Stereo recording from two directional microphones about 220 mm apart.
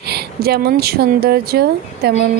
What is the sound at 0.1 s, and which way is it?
Speech, 45° right (ahead or behind).